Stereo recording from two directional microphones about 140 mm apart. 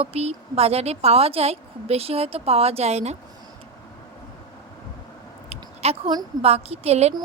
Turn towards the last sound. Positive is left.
turn(degrees=-50)  # may be behind; listen again after turning